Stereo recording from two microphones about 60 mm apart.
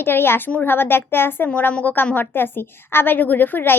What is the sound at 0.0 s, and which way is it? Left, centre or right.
A woman's voice, left.